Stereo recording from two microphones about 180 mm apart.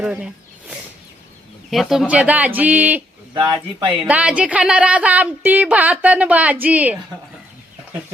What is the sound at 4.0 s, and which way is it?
A woman's voice, 5° right (ahead or behind).